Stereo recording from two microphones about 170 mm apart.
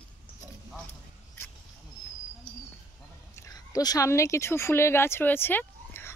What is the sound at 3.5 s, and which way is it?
Speech, 20° left (ahead or behind).